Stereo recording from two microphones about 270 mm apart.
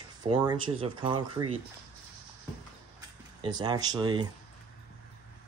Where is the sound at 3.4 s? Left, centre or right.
Centre.